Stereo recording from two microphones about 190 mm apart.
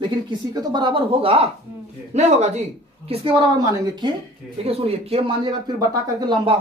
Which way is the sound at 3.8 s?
25° right (ahead or behind).